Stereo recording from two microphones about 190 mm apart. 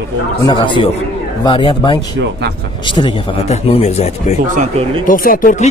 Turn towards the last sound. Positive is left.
turn(degrees=45)  # may be behind; listen again after turning